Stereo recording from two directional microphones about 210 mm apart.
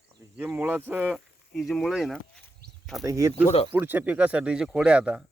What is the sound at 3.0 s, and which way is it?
Speech, 15° right (ahead or behind).